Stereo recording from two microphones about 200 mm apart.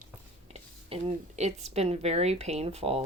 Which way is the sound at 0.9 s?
30° right (ahead or behind).